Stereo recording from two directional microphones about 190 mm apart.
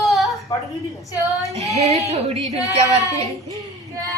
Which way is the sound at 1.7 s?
35° right (ahead or behind).